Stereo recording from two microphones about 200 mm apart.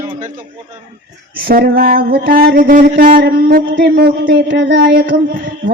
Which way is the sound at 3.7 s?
60° right (ahead or behind).